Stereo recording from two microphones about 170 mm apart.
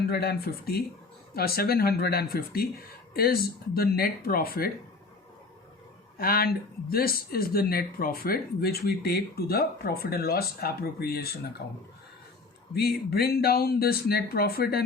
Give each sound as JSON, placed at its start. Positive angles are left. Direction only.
{"t": 0.0, "sound": "speech", "side_deg": 65}
{"t": 6.1, "sound": "speech", "side_deg": 60}
{"t": 12.7, "sound": "speech", "side_deg": 65}